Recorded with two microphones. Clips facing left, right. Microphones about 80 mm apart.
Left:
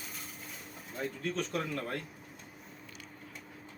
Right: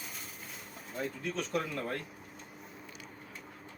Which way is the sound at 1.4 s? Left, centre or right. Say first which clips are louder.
Right 1 dB; centre.